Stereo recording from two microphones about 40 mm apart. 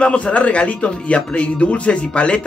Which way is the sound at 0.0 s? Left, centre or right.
Left.